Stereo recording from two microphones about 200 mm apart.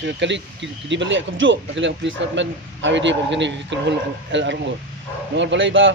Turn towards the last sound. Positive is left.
turn(degrees=-70)  # may be behind; listen again after turning